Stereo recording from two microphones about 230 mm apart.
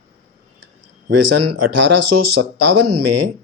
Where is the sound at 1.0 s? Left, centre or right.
Right.